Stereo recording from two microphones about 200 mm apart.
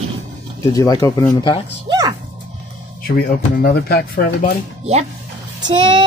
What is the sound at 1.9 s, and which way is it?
Dog, 20° right (ahead or behind).